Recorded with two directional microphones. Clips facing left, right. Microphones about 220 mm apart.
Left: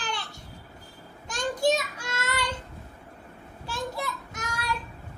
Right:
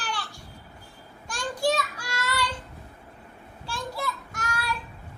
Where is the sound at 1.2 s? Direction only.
20° left (ahead or behind).